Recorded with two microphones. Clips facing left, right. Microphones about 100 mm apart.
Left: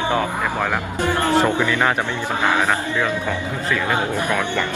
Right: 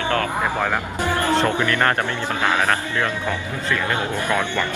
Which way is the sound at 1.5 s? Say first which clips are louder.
Left 1 dB; 15° left (ahead or behind).